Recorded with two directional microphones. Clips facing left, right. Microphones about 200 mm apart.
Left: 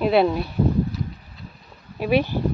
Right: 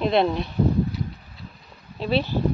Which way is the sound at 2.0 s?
15° left (ahead or behind).